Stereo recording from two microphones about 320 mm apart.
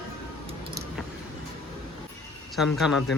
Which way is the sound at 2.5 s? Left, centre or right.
Centre.